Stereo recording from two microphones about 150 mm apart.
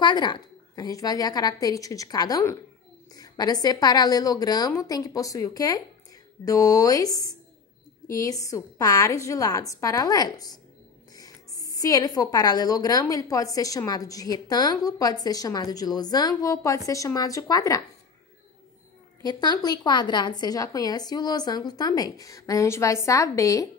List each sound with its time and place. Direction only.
0.0 s a woman's voice: 30° left (ahead or behind)
19.2 s a woman's voice: 25° left (ahead or behind)